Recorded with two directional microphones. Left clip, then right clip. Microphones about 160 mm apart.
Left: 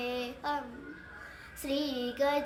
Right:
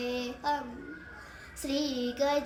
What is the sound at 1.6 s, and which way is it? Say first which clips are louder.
Female singing: right 1 dB; 15° left (ahead or behind).